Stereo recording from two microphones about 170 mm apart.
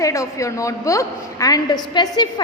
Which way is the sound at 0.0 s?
20° left (ahead or behind).